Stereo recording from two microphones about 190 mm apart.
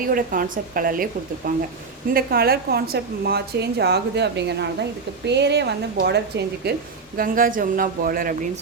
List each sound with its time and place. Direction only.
0.1 s a woman's voice: 50° right (ahead or behind); by 6.7 s 65° right (ahead or behind)
7.2 s speech: 45° right (ahead or behind)